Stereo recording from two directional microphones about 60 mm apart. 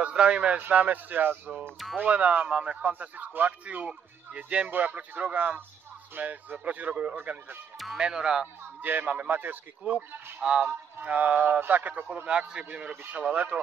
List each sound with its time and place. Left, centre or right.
0.0 s speech: centre
0.6 s speech: right
8.0 s speech: centre
8.8 s speech: right
10.6 s speech: right
12.3 s speech: centre